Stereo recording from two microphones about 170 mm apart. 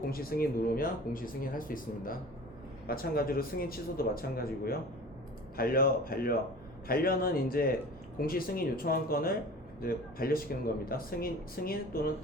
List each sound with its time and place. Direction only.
0.1 s speech: 60° left (ahead or behind)